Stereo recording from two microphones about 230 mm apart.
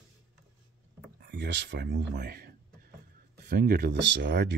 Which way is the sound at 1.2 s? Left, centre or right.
Right.